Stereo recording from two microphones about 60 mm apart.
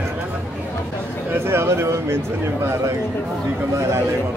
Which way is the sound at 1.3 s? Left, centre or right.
Right.